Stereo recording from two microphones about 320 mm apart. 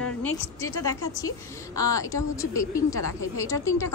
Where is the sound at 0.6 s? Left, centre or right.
Centre.